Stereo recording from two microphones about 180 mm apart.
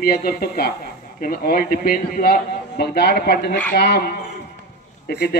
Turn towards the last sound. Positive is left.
turn(degrees=65)  # may be behind; listen again after turning